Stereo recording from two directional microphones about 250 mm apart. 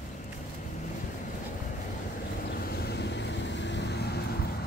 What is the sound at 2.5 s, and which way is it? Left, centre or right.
Vehicle, left.